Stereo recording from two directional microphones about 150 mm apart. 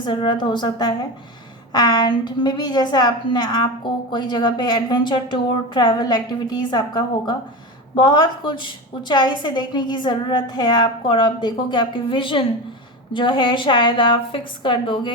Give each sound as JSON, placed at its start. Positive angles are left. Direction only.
{"t": 0.0, "sound": "a woman's voice", "side_deg": 30}